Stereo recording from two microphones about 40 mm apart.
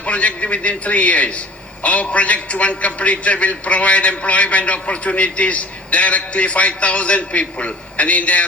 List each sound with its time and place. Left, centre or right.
0.0 s a man's voice: left